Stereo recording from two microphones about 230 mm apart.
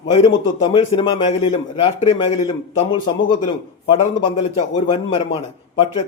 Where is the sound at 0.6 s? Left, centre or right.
Left.